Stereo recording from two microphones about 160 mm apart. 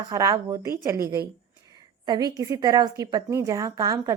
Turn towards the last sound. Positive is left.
turn(degrees=-20)  # may be behind; listen again after turning